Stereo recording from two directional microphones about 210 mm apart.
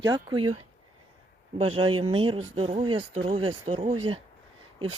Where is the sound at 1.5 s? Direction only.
25° right (ahead or behind).